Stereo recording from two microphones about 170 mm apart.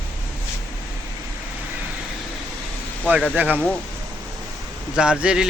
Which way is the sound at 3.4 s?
10° right (ahead or behind).